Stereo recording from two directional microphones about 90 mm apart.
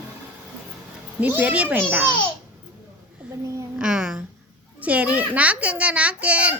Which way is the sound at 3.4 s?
40° right (ahead or behind).